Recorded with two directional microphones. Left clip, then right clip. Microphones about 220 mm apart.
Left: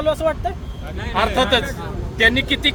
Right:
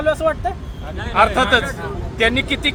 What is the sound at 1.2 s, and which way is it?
Speech, centre (ahead or behind).